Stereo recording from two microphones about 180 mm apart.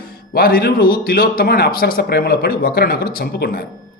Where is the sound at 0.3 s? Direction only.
55° left (ahead or behind).